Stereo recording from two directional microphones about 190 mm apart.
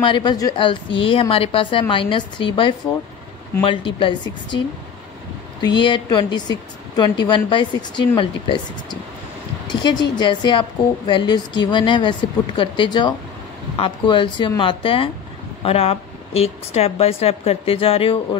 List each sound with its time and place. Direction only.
0.0 s a woman's voice: 25° left (ahead or behind)
5.8 s a woman's voice: 25° left (ahead or behind)
9.7 s a woman's voice: 25° left (ahead or behind)